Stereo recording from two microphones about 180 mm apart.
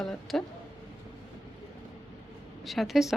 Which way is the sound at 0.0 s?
Centre (ahead or behind).